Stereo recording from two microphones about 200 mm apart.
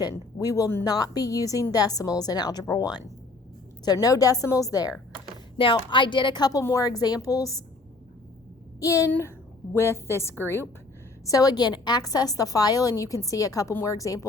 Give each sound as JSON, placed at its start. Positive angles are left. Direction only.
{"t": 0.0, "sound": "a woman's voice", "side_deg": 20}
{"t": 8.8, "sound": "a woman's voice", "side_deg": 15}